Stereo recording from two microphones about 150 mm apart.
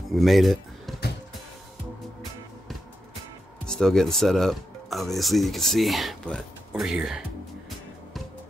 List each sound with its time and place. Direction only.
0.1 s speech: centre (ahead or behind)
3.6 s speech: 5° left (ahead or behind)